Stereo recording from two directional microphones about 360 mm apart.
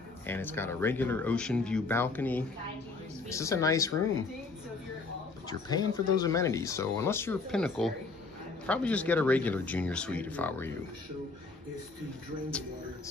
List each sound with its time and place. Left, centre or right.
0.3 s speech: centre
5.5 s speech: centre